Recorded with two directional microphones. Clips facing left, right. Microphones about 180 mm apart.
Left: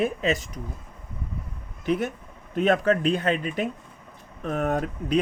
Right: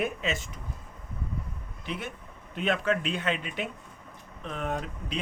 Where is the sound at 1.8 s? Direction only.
45° left (ahead or behind).